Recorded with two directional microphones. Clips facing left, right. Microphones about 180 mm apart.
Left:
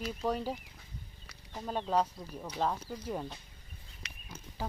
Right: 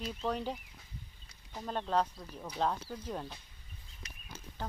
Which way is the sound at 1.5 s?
5° left (ahead or behind).